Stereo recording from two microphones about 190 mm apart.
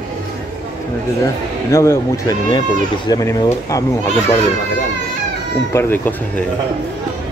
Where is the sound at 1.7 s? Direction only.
15° left (ahead or behind).